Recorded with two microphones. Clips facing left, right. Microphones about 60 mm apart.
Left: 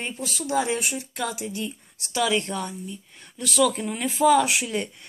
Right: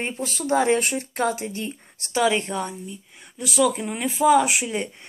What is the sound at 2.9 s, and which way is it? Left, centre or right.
Speech, centre.